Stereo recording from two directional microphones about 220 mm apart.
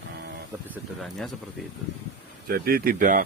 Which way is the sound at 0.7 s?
Centre (ahead or behind).